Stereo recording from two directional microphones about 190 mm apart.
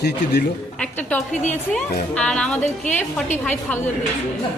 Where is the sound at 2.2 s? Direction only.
5° left (ahead or behind).